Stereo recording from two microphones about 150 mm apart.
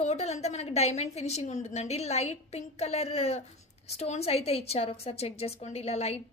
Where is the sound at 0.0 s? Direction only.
45° left (ahead or behind).